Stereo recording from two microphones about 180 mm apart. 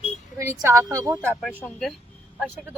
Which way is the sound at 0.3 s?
15° right (ahead or behind).